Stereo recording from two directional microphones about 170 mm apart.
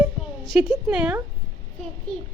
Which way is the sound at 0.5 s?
5° right (ahead or behind).